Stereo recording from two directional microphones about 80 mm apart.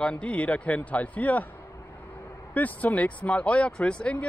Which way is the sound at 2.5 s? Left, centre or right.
Centre.